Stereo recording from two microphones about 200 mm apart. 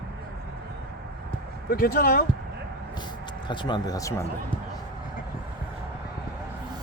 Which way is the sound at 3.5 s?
25° left (ahead or behind).